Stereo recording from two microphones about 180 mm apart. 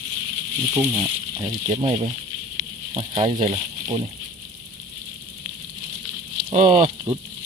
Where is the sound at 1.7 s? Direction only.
30° right (ahead or behind).